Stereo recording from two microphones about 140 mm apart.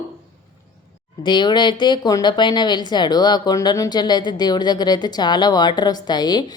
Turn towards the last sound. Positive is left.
turn(degrees=30)  # may be behind; listen again after turning